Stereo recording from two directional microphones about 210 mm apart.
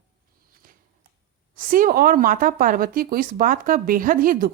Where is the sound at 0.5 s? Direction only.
40° right (ahead or behind).